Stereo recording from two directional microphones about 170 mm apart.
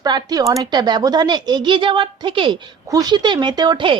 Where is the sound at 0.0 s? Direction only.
25° right (ahead or behind).